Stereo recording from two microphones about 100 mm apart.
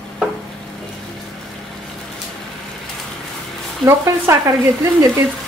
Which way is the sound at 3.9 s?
30° right (ahead or behind).